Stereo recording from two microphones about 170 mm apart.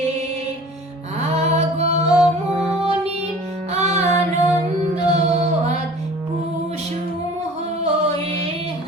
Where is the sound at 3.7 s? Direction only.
40° right (ahead or behind).